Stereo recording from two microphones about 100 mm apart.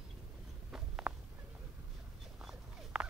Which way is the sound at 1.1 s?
25° right (ahead or behind).